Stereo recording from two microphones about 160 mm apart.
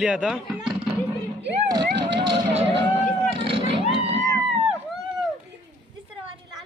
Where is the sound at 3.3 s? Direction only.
35° right (ahead or behind).